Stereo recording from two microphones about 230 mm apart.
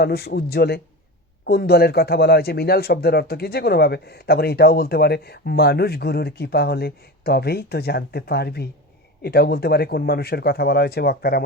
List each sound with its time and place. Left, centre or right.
0.0 s speech: left